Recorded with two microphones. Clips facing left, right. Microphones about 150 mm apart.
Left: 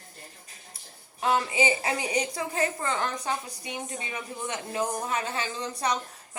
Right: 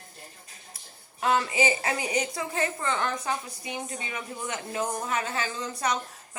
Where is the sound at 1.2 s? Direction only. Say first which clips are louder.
Even; 25° left (ahead or behind).